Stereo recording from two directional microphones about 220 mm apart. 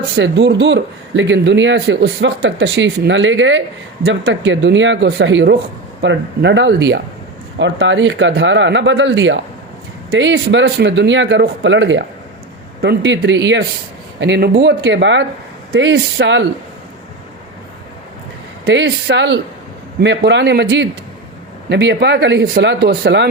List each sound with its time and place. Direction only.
0.2 s speech: 55° right (ahead or behind)
18.6 s speech: 55° right (ahead or behind)